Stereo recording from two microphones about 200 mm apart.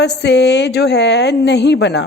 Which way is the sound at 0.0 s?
60° left (ahead or behind).